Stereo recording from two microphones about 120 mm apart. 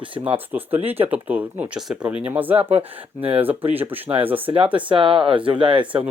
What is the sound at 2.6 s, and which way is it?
Speech, 60° right (ahead or behind).